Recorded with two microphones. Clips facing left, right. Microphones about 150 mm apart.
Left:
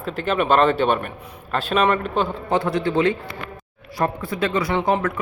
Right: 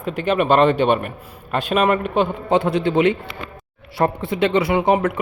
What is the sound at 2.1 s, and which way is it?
Speech, 20° right (ahead or behind).